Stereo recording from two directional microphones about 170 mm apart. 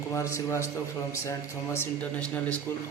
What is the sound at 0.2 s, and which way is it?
A man's voice, 15° left (ahead or behind).